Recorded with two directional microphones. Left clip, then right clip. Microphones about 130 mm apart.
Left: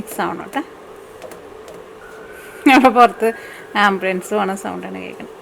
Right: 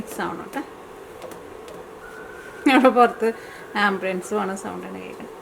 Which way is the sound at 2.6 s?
25° left (ahead or behind).